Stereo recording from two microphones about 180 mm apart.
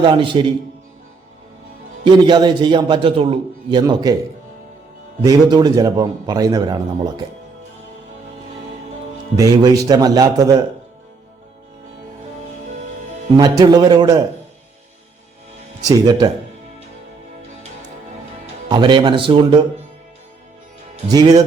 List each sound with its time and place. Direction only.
0.0 s a man's voice: 25° right (ahead or behind)
2.0 s a man's voice: 25° right (ahead or behind)
5.2 s a man's voice: 20° right (ahead or behind)
9.4 s a man's voice: 20° right (ahead or behind)
13.3 s a man's voice: 20° right (ahead or behind)
15.9 s a man's voice: 20° right (ahead or behind)
18.7 s a man's voice: 25° right (ahead or behind)
21.1 s a man's voice: 20° right (ahead or behind)